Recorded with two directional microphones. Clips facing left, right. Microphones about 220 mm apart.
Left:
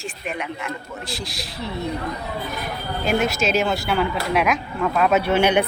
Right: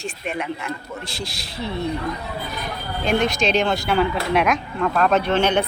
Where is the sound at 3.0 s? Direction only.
5° left (ahead or behind).